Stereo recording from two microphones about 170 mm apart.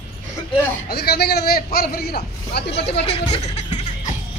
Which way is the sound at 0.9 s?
70° left (ahead or behind).